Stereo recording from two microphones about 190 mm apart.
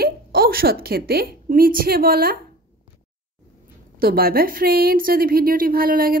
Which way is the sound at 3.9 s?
50° right (ahead or behind).